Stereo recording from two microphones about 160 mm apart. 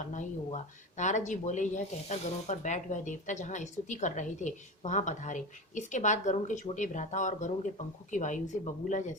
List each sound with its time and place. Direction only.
0.0 s speech: 50° left (ahead or behind)